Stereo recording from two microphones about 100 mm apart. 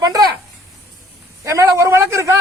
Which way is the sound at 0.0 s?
40° right (ahead or behind).